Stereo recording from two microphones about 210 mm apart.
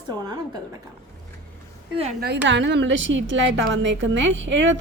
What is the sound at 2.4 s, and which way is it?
A woman's voice, 60° right (ahead or behind).